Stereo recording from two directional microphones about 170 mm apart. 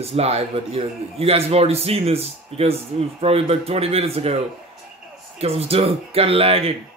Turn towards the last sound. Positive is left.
turn(degrees=-35)  # may be behind; listen again after turning